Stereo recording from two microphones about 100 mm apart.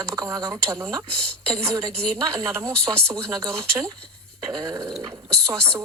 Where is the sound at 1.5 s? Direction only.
35° right (ahead or behind).